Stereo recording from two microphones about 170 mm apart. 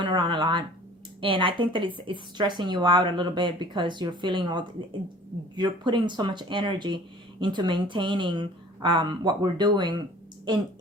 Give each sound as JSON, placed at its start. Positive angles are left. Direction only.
{"t": 0.0, "sound": "speech", "side_deg": -30}